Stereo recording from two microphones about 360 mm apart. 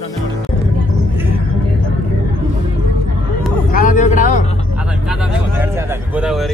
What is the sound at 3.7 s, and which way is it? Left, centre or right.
Speech, left.